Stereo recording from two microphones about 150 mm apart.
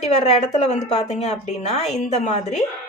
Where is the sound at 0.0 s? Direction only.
45° left (ahead or behind).